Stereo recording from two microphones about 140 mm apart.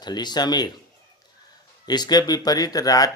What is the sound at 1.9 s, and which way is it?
Speech, 30° left (ahead or behind).